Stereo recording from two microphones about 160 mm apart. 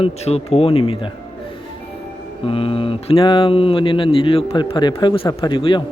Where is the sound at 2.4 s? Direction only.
35° left (ahead or behind).